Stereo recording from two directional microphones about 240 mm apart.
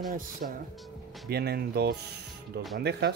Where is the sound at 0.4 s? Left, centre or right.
Right.